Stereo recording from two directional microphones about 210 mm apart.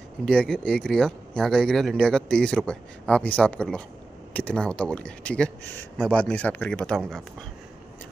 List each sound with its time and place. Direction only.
0.2 s speech: 5° left (ahead or behind)